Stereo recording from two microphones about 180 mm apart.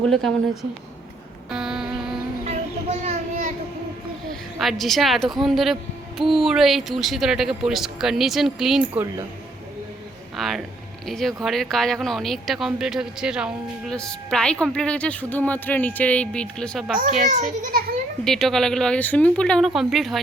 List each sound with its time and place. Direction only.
0.1 s speech: centre (ahead or behind)
1.5 s a sound: 5° right (ahead or behind)
2.4 s a sound: 40° right (ahead or behind)
4.3 s speech: centre (ahead or behind)
10.3 s speech: centre (ahead or behind)
17.2 s a child's voice: 45° right (ahead or behind)
18.3 s speech: centre (ahead or behind)